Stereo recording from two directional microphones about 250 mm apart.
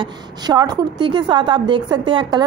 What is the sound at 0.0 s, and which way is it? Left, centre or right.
A woman's voice, centre.